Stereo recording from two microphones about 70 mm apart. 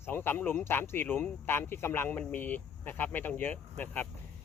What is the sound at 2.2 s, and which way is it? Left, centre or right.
Speech, left.